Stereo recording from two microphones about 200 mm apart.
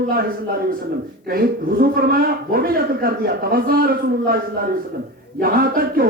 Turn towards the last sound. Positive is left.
turn(degrees=-50)  # may be behind; listen again after turning